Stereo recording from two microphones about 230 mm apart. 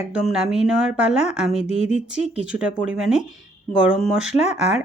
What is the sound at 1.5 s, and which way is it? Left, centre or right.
Speech, left.